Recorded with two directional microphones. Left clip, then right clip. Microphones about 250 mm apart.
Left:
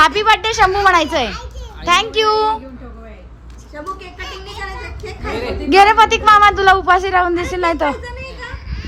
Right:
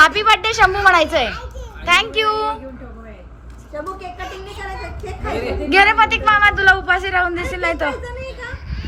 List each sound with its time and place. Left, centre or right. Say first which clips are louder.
0.0 s speech: even; centre
4.2 s speech: left 2 dB; centre
5.6 s a woman's voice: left 3 dB; centre
8.0 s a sound: even; centre